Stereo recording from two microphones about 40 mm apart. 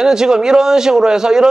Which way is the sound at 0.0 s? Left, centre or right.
Centre.